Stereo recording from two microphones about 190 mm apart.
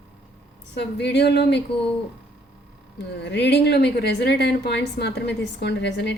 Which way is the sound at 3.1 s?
65° left (ahead or behind).